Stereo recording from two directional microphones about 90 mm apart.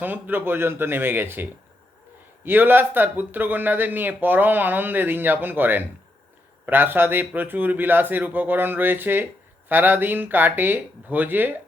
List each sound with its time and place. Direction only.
0.0 s speech: 20° right (ahead or behind)